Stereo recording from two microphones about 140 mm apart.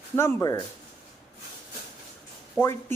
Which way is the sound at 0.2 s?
20° left (ahead or behind).